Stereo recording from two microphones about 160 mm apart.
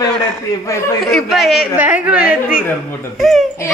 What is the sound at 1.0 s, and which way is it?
A woman's voice, centre (ahead or behind).